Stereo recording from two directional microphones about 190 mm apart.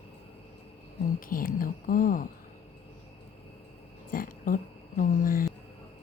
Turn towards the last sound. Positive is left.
turn(degrees=45)  # may be behind; listen again after turning